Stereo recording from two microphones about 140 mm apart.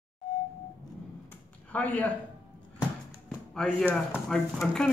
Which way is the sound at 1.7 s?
10° left (ahead or behind).